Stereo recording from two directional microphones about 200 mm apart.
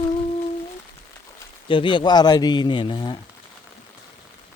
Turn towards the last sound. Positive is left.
turn(degrees=25)  # may be behind; listen again after turning